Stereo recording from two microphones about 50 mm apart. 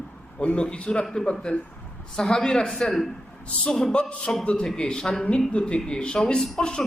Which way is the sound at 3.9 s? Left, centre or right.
Left.